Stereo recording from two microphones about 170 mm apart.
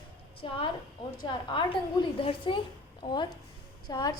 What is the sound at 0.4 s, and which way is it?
A woman's voice, 35° left (ahead or behind).